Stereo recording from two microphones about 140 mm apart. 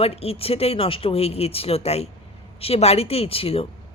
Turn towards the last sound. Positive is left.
turn(degrees=45)  # may be behind; listen again after turning